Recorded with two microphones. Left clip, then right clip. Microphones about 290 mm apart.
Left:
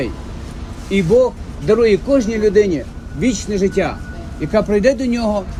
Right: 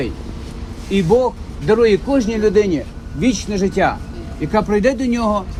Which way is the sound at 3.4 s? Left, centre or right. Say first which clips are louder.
Left 2 dB; right.